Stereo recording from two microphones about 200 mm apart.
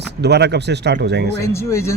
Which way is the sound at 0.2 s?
55° right (ahead or behind).